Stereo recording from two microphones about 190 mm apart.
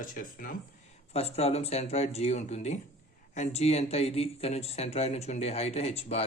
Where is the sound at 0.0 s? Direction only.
45° left (ahead or behind).